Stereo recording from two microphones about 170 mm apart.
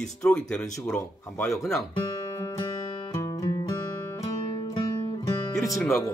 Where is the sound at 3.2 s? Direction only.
20° left (ahead or behind).